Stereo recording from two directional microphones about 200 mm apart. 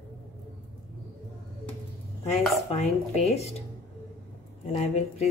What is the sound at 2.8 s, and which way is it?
Speech, 35° left (ahead or behind).